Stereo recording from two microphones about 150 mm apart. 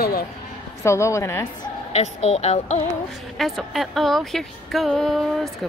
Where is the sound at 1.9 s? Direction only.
45° left (ahead or behind).